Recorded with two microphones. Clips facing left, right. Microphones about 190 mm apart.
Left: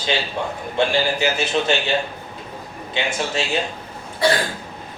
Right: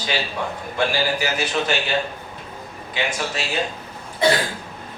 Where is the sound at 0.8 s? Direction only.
25° left (ahead or behind).